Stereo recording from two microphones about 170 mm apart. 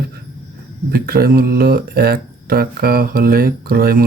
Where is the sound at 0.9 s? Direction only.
60° right (ahead or behind).